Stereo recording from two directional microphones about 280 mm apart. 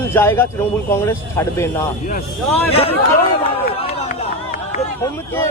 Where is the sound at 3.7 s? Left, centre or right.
Left.